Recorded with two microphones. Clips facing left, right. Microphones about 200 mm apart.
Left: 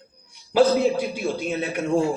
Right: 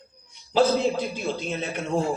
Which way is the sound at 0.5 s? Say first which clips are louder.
Left 3 dB; 10° left (ahead or behind).